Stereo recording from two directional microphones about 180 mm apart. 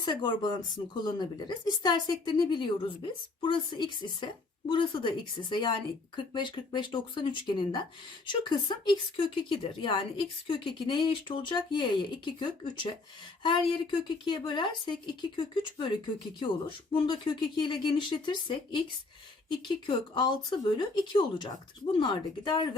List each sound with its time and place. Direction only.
0.0 s speech: 25° left (ahead or behind)